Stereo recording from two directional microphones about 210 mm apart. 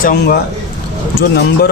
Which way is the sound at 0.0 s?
45° left (ahead or behind).